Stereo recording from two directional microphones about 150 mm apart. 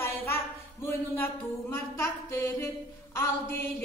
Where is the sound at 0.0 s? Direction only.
15° left (ahead or behind).